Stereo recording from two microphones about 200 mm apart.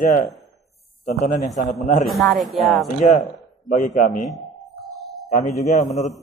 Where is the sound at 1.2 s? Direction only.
35° left (ahead or behind).